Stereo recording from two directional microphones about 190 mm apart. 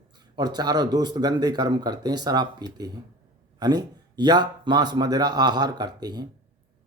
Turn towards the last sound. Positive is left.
turn(degrees=-20)  # may be behind; listen again after turning